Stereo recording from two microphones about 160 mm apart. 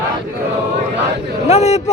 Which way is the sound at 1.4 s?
45° left (ahead or behind).